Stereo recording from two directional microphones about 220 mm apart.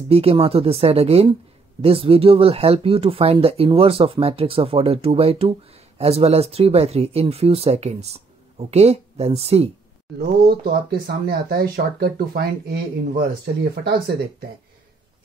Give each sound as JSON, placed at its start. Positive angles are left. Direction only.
{"t": 0.1, "sound": "speech", "side_deg": -25}
{"t": 10.7, "sound": "speech", "side_deg": -45}